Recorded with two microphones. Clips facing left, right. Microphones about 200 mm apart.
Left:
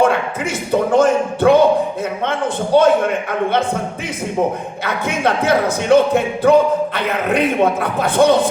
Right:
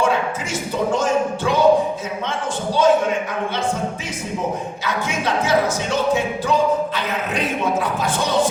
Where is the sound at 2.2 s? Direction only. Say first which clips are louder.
Left 4 dB; 60° left (ahead or behind).